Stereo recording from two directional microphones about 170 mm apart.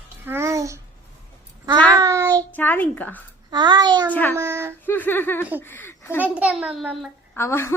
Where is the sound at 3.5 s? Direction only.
25° right (ahead or behind).